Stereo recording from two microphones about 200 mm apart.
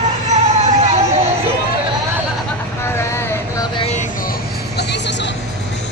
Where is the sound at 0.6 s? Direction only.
35° right (ahead or behind).